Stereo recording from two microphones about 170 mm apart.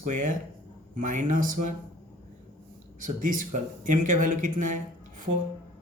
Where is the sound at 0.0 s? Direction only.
50° right (ahead or behind).